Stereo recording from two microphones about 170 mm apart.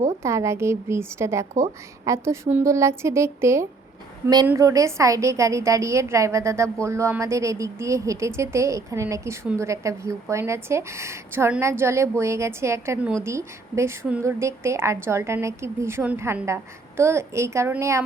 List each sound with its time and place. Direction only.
0.2 s a woman's voice: 15° right (ahead or behind)